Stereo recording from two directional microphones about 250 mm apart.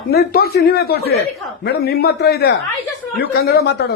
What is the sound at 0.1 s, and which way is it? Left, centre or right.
Speech, left.